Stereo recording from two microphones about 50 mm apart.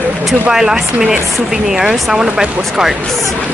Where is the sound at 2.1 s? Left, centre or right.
Centre.